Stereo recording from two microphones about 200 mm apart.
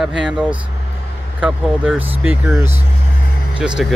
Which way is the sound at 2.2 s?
5° right (ahead or behind).